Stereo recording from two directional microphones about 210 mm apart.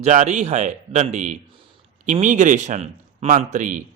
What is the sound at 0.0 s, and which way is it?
A man's voice, 35° right (ahead or behind).